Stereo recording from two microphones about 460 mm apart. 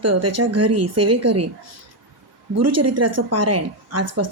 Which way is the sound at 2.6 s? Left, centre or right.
Right.